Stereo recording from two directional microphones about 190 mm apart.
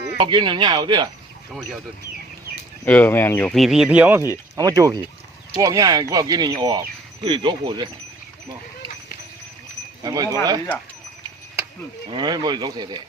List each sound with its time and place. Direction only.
0.2 s speech: 25° right (ahead or behind)
2.8 s speech: 10° left (ahead or behind)
3.5 s speech: centre (ahead or behind); by 7.9 s 25° right (ahead or behind)
10.0 s speech: 20° right (ahead or behind)
12.1 s speech: 20° right (ahead or behind)